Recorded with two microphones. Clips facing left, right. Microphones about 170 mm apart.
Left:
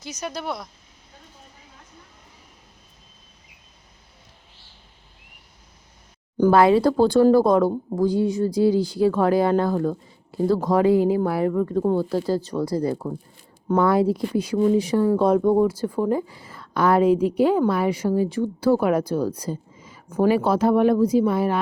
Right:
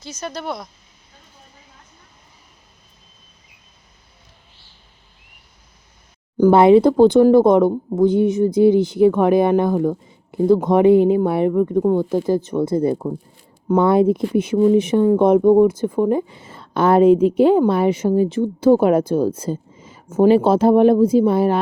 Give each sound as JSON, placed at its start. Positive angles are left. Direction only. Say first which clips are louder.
{"t": 0.0, "sound": "speech", "louder": "right 2 dB", "side_deg": 15}
{"t": 6.5, "sound": "a woman's voice", "louder": "right 5 dB", "side_deg": -25}